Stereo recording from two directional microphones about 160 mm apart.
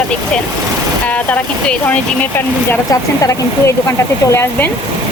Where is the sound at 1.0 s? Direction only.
10° left (ahead or behind).